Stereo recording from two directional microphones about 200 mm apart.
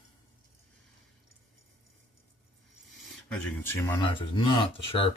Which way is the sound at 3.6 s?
10° left (ahead or behind).